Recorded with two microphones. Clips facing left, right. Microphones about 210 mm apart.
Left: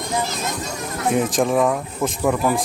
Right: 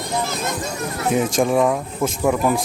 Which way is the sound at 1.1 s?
Centre (ahead or behind).